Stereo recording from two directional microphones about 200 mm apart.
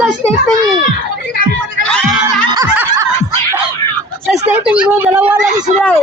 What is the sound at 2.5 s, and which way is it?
Snicker, 15° right (ahead or behind).